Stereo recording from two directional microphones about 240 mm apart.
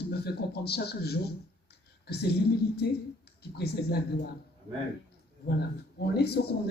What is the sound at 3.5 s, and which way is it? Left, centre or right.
Speech, left.